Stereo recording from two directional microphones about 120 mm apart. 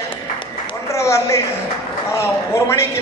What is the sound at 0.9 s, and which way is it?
A man's voice, 25° left (ahead or behind).